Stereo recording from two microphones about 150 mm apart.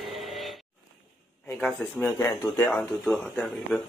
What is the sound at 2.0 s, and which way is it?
Speech, 15° left (ahead or behind).